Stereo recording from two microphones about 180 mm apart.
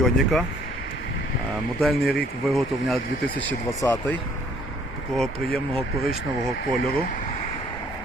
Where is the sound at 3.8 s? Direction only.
15° left (ahead or behind).